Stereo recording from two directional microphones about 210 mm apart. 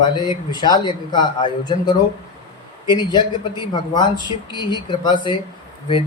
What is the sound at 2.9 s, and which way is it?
Speech, 20° left (ahead or behind).